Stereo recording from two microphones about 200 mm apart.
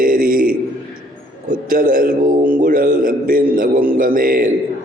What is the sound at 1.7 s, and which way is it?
A man's voice, 45° right (ahead or behind).